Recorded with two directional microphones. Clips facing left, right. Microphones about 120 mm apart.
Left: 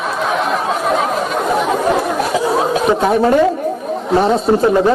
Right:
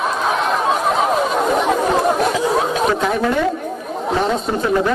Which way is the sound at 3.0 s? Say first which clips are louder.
Left 6 dB; 35° left (ahead or behind).